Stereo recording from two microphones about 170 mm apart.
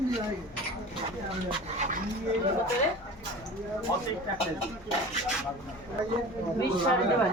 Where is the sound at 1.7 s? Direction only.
45° right (ahead or behind).